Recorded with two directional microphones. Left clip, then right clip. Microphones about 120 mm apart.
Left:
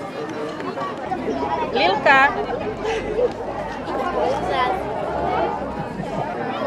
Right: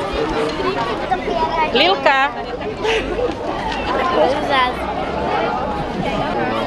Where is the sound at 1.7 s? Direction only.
20° right (ahead or behind).